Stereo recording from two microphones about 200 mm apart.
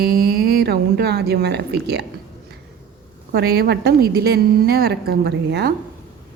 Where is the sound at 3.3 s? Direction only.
50° right (ahead or behind).